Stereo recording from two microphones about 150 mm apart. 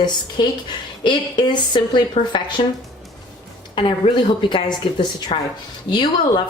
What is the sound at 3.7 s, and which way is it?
A woman's voice, 35° left (ahead or behind).